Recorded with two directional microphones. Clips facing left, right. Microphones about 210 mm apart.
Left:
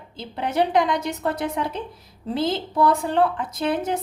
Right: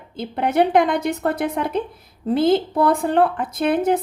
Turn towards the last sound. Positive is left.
turn(degrees=-55)  # may be behind; listen again after turning